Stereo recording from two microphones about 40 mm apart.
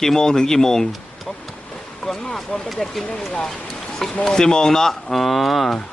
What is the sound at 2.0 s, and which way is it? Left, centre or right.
Speech, left.